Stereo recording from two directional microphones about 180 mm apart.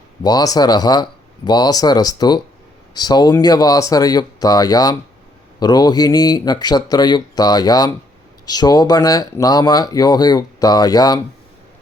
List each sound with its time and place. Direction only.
0.2 s speech: 20° left (ahead or behind)